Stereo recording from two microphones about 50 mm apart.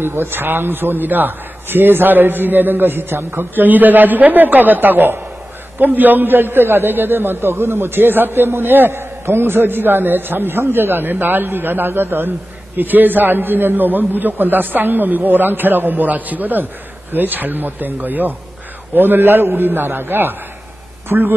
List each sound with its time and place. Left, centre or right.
0.0 s a man's voice: right
7.3 s a man's voice: right